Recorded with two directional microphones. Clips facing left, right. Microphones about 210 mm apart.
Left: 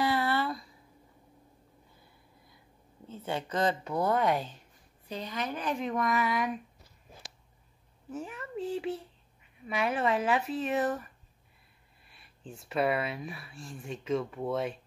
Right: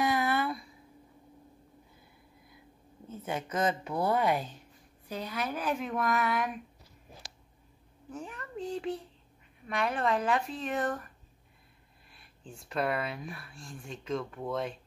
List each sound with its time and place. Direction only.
0.0 s a sound: 15° right (ahead or behind)
3.5 s speech: 5° right (ahead or behind)
8.1 s speech: 5° left (ahead or behind)
12.1 s speech: centre (ahead or behind)